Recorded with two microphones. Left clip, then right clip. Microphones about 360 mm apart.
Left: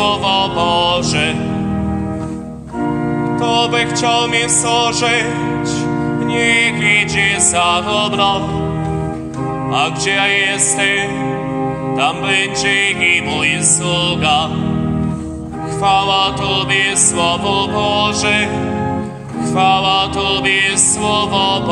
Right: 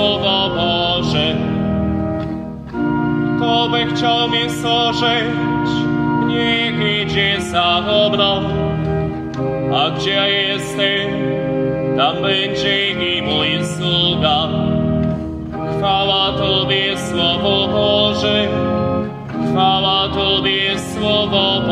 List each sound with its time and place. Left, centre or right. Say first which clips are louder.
0.0 s music: left 1 dB; centre
3.3 s music: left 2 dB; centre
6.3 s music: left 4 dB; centre
9.8 s music: left 2 dB; centre
12.0 s music: left 2 dB; centre
15.8 s music: left 3 dB; centre
19.5 s music: left 2 dB; centre